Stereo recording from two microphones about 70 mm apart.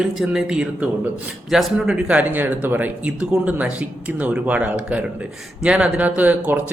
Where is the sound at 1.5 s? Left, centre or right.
Centre.